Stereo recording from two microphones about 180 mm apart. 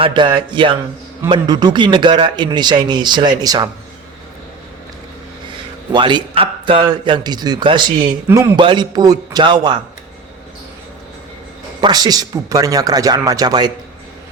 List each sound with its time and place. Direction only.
0.0 s a man's voice: 25° right (ahead or behind)
5.9 s a man's voice: 25° right (ahead or behind)
11.8 s a man's voice: 20° right (ahead or behind)